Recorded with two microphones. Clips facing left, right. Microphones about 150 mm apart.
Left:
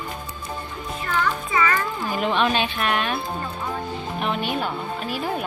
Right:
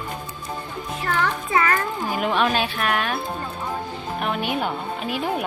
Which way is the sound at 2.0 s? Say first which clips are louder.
Even; 5° right (ahead or behind).